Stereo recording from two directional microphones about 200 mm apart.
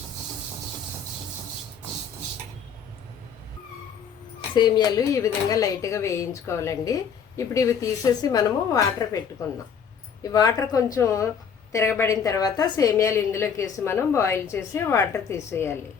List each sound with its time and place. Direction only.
4.5 s speech: 20° left (ahead or behind)
10.2 s speech: 20° left (ahead or behind)